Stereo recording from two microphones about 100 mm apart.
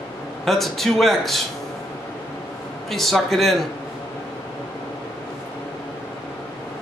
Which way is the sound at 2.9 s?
Centre (ahead or behind).